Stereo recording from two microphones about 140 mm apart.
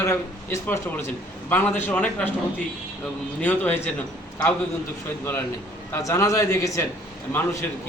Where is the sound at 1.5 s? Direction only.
15° left (ahead or behind).